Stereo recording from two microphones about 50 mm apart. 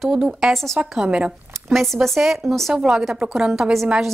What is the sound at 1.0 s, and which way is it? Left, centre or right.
Speech, centre.